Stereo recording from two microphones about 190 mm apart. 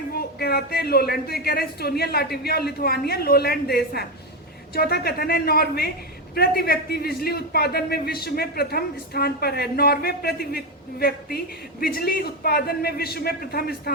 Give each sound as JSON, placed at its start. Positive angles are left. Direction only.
{"t": 0.1, "sound": "a man's voice", "side_deg": 55}